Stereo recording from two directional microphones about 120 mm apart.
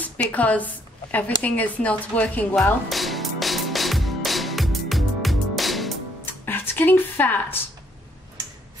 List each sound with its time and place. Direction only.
0.3 s speech: 10° left (ahead or behind)
2.9 s music: centre (ahead or behind)
6.4 s music: 15° left (ahead or behind)